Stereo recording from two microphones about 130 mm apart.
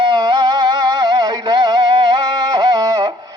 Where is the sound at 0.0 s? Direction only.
35° right (ahead or behind).